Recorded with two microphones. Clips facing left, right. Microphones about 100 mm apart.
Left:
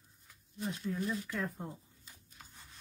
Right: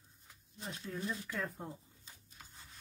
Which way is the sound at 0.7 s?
10° left (ahead or behind).